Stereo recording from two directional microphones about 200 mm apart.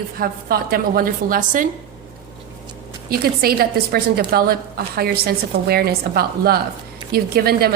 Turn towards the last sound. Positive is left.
turn(degrees=-50)  # may be behind; listen again after turning